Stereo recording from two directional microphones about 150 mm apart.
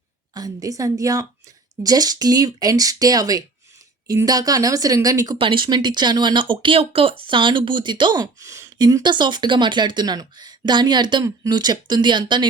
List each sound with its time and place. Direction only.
0.3 s speech: 25° right (ahead or behind)